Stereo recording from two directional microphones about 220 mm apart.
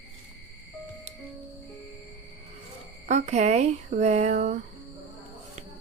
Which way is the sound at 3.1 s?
30° right (ahead or behind).